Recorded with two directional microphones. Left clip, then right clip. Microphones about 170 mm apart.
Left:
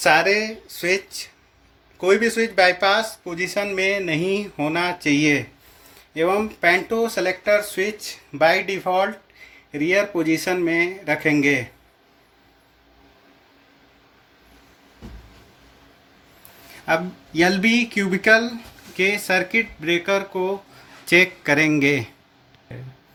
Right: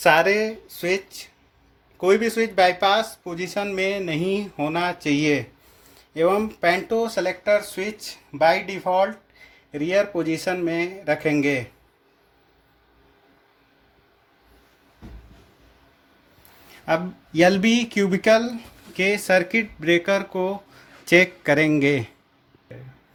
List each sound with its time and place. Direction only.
0.0 s speech: 30° right (ahead or behind)
16.8 s speech: 45° right (ahead or behind); by 22.1 s 25° right (ahead or behind)